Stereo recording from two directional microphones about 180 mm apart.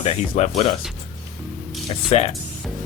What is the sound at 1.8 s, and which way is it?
Speech, 35° left (ahead or behind).